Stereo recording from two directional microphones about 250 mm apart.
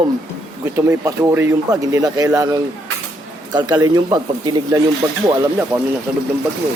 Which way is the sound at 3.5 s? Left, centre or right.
Centre.